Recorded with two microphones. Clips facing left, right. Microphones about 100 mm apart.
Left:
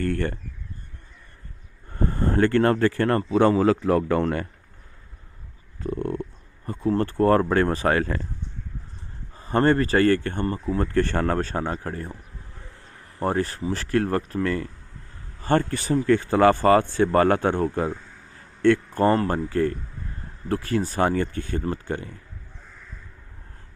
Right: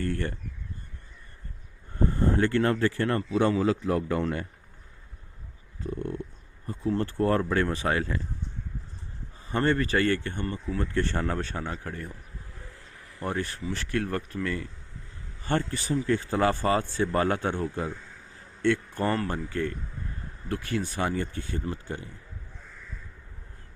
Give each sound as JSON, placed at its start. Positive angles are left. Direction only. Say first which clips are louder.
{"t": 0.0, "sound": "a sound", "louder": "left 5 dB", "side_deg": 70}
{"t": 2.0, "sound": "speech", "louder": "left 3 dB", "side_deg": 60}
{"t": 5.8, "sound": "a sound", "louder": "left 5 dB", "side_deg": 65}
{"t": 6.7, "sound": "speech", "louder": "left 5 dB", "side_deg": 60}
{"t": 7.9, "sound": "speech", "louder": "left 5 dB", "side_deg": 60}
{"t": 9.5, "sound": "speech", "louder": "left 6 dB", "side_deg": 45}
{"t": 11.3, "sound": "speech", "louder": "left 7 dB", "side_deg": 45}
{"t": 14.4, "sound": "speech", "louder": "left 6 dB", "side_deg": 50}
{"t": 21.0, "sound": "speech", "louder": "left 7 dB", "side_deg": 60}